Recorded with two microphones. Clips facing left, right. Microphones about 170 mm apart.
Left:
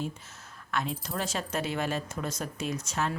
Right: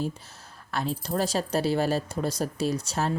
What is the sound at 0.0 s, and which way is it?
Speech, 35° right (ahead or behind).